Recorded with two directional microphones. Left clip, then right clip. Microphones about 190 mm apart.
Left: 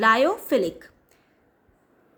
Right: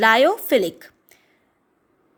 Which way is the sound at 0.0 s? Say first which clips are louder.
Right 4 dB; 15° right (ahead or behind).